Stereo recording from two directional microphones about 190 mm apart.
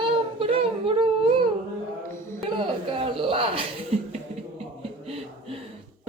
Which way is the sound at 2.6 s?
30° right (ahead or behind).